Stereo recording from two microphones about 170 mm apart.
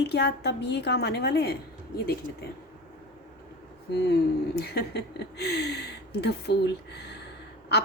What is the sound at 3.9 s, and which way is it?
Speech, 70° left (ahead or behind).